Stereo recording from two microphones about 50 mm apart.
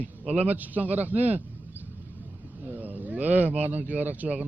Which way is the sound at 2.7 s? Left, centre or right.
Right.